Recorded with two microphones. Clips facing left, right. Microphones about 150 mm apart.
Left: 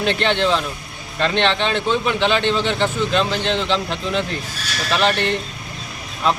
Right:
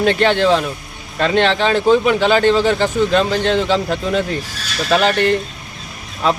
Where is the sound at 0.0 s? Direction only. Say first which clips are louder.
Right 5 dB; 45° right (ahead or behind).